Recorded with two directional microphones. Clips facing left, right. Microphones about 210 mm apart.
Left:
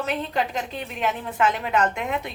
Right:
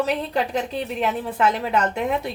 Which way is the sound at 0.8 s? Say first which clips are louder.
Right 3 dB; 35° right (ahead or behind).